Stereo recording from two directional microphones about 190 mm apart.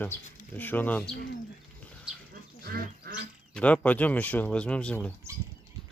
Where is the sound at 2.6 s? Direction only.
55° right (ahead or behind).